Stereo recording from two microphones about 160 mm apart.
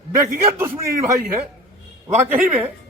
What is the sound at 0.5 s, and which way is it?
Speech, 15° right (ahead or behind).